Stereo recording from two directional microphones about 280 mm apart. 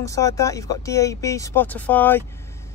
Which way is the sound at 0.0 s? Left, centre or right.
Centre.